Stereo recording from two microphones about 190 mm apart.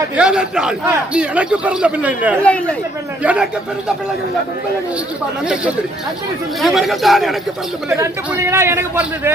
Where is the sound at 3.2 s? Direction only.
5° right (ahead or behind).